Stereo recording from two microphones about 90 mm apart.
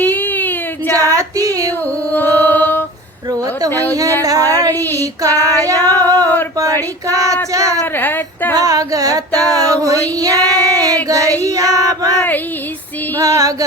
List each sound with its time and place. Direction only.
0.0 s a sound: 20° left (ahead or behind)
0.9 s female singing: 40° right (ahead or behind)
2.1 s music: 20° left (ahead or behind)
4.2 s child singing: 40° right (ahead or behind)
5.9 s female singing: 40° right (ahead or behind)
7.5 s child singing: 40° right (ahead or behind)
7.9 s speech: 20° left (ahead or behind)
8.5 s child singing: 40° right (ahead or behind)